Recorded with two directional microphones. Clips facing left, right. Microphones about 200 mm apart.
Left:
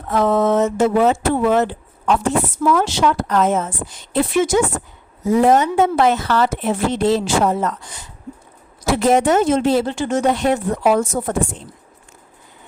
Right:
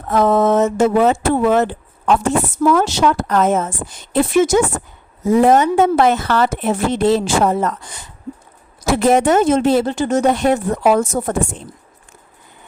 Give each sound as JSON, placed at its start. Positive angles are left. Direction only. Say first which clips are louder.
{"t": 0.1, "sound": "speech", "louder": "right 2 dB", "side_deg": -45}